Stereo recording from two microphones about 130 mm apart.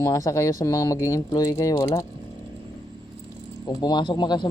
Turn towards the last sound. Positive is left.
turn(degrees=35)  # may be behind; listen again after turning